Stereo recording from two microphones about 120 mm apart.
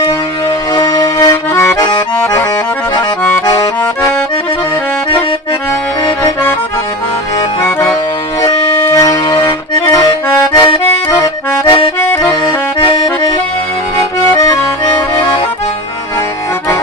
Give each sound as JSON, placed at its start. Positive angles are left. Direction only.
{"t": 0.0, "sound": "music", "side_deg": 25}
{"t": 0.8, "sound": "accordion", "side_deg": 25}
{"t": 2.2, "sound": "accordion", "side_deg": 20}
{"t": 8.4, "sound": "accordion", "side_deg": 25}
{"t": 13.9, "sound": "accordion", "side_deg": 25}